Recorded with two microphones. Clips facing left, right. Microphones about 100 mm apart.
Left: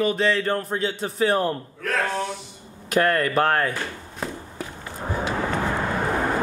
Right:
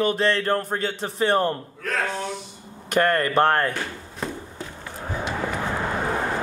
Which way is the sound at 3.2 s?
45° right (ahead or behind).